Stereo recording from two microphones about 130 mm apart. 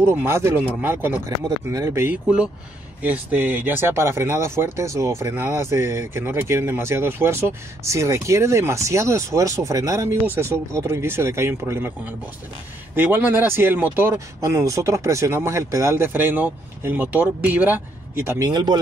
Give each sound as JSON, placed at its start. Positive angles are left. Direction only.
{"t": 0.0, "sound": "speech", "side_deg": -20}
{"t": 2.2, "sound": "speech", "side_deg": -5}
{"t": 18.5, "sound": "speech", "side_deg": -35}